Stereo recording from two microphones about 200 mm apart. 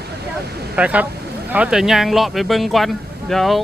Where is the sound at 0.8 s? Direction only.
5° right (ahead or behind).